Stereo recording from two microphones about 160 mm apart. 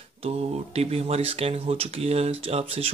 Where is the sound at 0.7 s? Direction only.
40° right (ahead or behind).